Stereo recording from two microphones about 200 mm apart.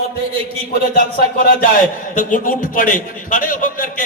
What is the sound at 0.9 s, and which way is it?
A man's voice, 45° left (ahead or behind).